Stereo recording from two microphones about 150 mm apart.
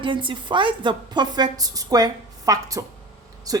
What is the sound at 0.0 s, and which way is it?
A woman's voice, 35° right (ahead or behind).